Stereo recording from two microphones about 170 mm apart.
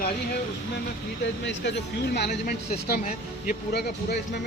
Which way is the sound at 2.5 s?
55° left (ahead or behind).